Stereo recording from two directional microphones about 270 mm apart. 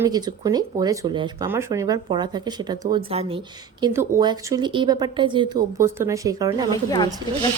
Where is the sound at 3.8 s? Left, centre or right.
Centre.